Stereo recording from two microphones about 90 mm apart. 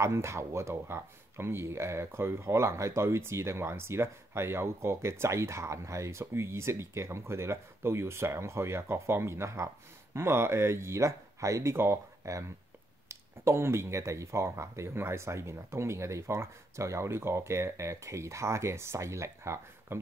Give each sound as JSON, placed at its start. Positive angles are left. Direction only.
{"t": 0.0, "sound": "speech", "side_deg": -30}